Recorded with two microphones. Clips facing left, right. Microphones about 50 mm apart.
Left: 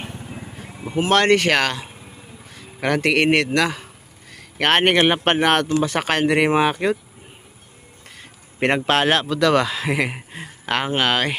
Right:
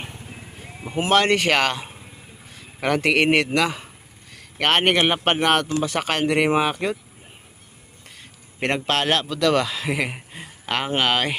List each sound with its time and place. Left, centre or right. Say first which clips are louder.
1.1 s a man's voice: left 2 dB; centre
4.5 s speech: left 2 dB; centre
8.6 s speech: left 4 dB; centre